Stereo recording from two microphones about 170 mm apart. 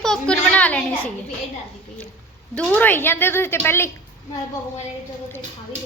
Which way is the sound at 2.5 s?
10° left (ahead or behind).